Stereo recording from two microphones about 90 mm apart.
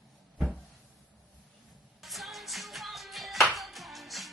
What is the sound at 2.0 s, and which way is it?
Music, centre (ahead or behind).